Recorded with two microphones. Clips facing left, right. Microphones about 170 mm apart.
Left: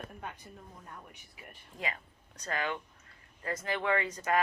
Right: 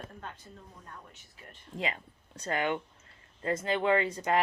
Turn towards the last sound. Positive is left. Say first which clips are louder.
# right 3 dB
turn(degrees=-25)  # may be behind; listen again after turning